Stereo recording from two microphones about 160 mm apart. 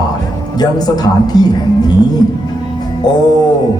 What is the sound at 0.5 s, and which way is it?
Speech, 25° left (ahead or behind).